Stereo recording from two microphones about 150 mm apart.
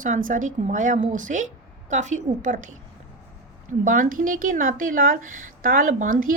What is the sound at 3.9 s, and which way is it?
A woman's voice, 65° right (ahead or behind).